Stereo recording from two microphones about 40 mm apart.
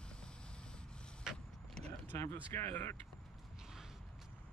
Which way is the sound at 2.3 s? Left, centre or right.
Left.